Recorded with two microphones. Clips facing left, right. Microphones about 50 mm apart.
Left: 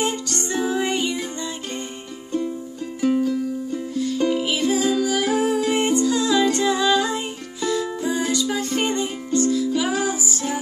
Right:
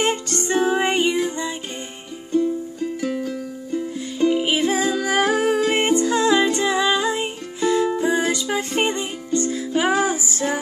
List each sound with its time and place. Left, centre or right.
0.0 s music: right
3.9 s music: right
4.5 s music: right